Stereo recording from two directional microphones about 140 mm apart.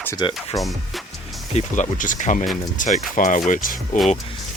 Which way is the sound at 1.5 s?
65° left (ahead or behind).